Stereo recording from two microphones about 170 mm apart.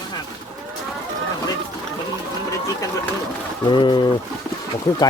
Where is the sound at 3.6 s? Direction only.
30° left (ahead or behind).